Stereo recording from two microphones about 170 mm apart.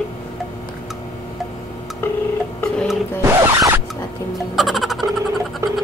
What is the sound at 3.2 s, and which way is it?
Zipper, 15° right (ahead or behind).